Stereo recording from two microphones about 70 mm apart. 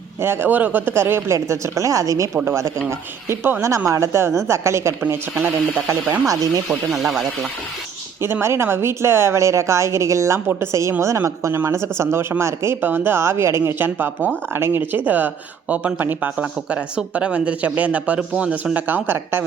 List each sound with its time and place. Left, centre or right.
0.2 s speech: right
6.7 s speech: centre
8.2 s speech: right; by 18.8 s centre
18.9 s speech: right